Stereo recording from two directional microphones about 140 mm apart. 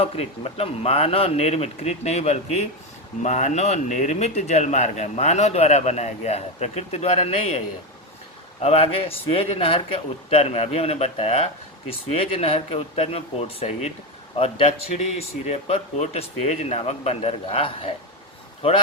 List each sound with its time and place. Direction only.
0.0 s speech: 45° left (ahead or behind)
8.6 s speech: 45° left (ahead or behind)
14.9 s speech: 55° left (ahead or behind)